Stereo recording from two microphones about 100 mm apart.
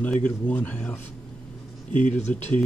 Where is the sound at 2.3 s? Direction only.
15° left (ahead or behind).